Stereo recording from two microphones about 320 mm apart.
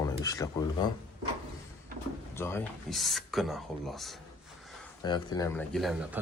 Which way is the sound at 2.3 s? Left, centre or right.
Centre.